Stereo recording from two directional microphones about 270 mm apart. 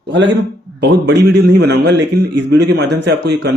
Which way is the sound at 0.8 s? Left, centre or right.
Right.